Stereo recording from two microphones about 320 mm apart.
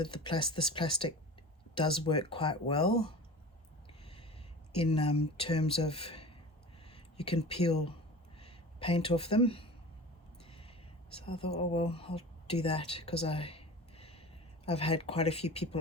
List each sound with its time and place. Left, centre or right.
0.0 s speech: centre
4.0 s a sound: centre
4.7 s speech: centre
6.8 s a sound: centre
8.4 s speech: centre
11.1 s speech: centre